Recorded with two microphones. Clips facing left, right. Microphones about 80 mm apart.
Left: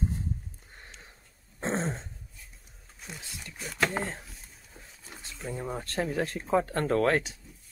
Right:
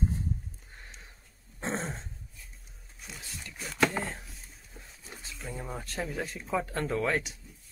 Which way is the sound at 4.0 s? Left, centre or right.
Left.